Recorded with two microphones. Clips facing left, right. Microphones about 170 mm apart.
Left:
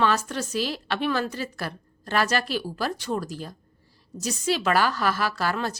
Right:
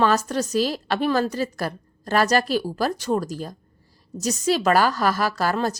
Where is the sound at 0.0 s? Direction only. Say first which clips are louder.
Right 4 dB; 40° right (ahead or behind).